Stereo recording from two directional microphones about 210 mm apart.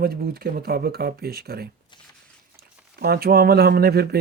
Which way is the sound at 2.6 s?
45° right (ahead or behind).